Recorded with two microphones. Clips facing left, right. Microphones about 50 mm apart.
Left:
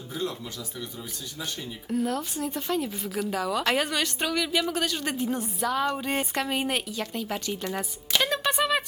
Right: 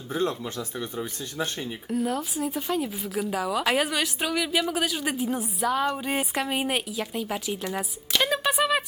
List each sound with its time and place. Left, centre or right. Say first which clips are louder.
0.1 s speech: right 5 dB; right
1.9 s speech: even; centre